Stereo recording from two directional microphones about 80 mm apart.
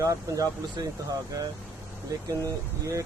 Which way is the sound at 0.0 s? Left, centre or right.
Right.